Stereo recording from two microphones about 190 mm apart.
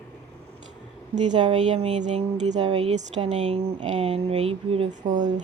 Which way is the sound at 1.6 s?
35° right (ahead or behind).